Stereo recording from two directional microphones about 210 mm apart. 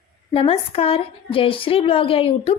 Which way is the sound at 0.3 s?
25° left (ahead or behind).